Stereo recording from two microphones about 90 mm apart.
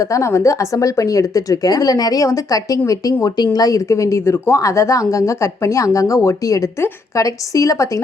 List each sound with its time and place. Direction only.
0.0 s speech: 35° left (ahead or behind)